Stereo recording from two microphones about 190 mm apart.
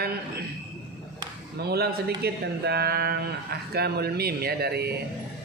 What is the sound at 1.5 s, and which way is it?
Speech, 55° right (ahead or behind).